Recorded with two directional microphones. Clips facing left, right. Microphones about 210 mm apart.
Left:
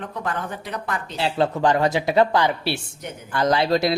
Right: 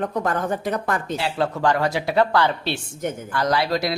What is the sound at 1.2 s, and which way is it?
Speech, 20° left (ahead or behind).